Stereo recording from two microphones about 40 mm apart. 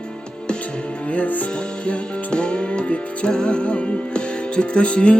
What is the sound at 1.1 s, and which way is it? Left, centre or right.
Music, left.